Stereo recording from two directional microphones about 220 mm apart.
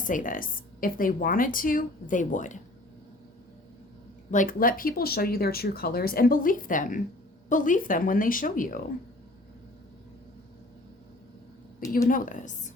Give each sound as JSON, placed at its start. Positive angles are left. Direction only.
{"t": 0.0, "sound": "speech", "side_deg": 35}
{"t": 4.3, "sound": "speech", "side_deg": 35}
{"t": 12.0, "sound": "speech", "side_deg": 40}